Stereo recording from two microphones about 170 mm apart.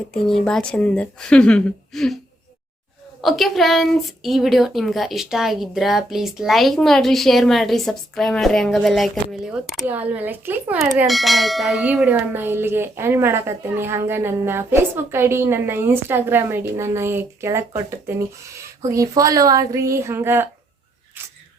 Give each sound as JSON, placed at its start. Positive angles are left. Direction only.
{"t": 0.1, "sound": "a woman's voice", "side_deg": 5}
{"t": 3.2, "sound": "a woman's voice", "side_deg": 0}
{"t": 10.8, "sound": "speech", "side_deg": 0}